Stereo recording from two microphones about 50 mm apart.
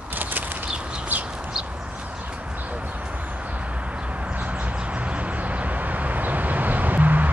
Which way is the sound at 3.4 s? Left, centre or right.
Right.